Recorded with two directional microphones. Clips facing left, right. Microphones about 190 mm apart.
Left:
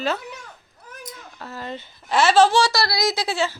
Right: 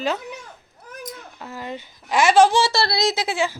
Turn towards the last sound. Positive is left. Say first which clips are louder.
# right 1 dB
turn(degrees=-15)  # may be behind; listen again after turning